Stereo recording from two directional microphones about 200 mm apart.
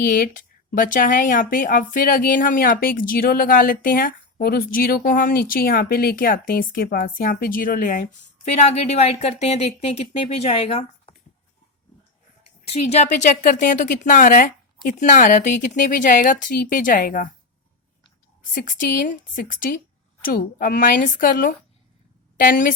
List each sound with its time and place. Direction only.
0.0 s speech: 45° left (ahead or behind)
12.4 s speech: 30° left (ahead or behind)
18.5 s speech: 40° left (ahead or behind)